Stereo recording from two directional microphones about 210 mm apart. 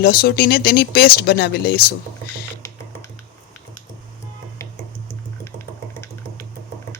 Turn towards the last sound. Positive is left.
turn(degrees=10)  # may be behind; listen again after turning